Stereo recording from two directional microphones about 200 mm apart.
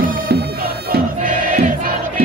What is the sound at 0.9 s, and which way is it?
Crowd, 45° right (ahead or behind).